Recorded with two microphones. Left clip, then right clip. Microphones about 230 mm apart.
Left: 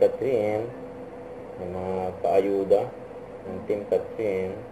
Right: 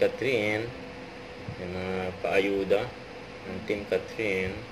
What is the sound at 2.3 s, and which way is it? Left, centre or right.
Speech, right.